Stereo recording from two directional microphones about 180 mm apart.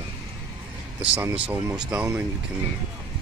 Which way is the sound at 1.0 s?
10° right (ahead or behind).